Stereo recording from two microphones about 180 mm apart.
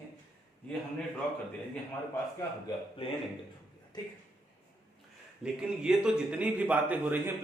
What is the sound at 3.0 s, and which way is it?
Speech, 30° left (ahead or behind).